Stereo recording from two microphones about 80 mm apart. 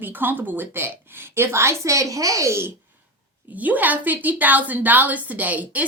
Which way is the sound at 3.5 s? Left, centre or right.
Centre.